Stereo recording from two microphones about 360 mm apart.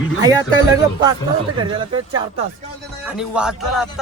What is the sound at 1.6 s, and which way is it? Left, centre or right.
Speech, centre.